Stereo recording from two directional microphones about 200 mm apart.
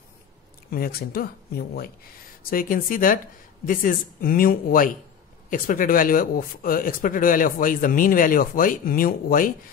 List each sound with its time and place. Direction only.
0.7 s speech: 50° left (ahead or behind)